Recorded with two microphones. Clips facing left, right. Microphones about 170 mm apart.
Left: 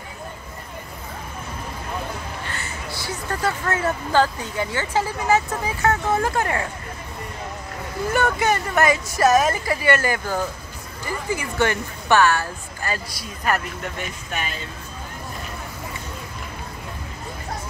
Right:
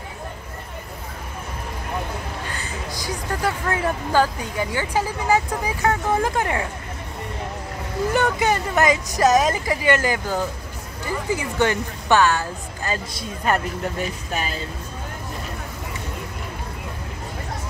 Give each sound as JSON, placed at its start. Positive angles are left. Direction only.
{"t": 2.5, "sound": "speech", "side_deg": -15}
{"t": 8.1, "sound": "speech", "side_deg": -15}